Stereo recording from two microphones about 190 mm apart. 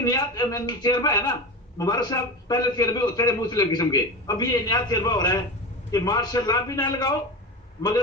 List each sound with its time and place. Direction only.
0.0 s a man's voice: 20° left (ahead or behind)